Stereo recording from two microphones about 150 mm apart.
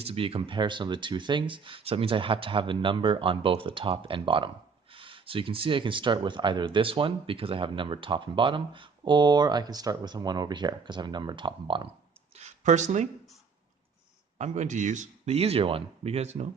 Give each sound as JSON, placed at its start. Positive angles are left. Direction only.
{"t": 0.0, "sound": "speech", "side_deg": -40}
{"t": 12.4, "sound": "a sound", "side_deg": -50}
{"t": 14.3, "sound": "speech", "side_deg": -50}